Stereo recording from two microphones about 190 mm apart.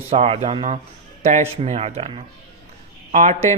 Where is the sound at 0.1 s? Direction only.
35° right (ahead or behind).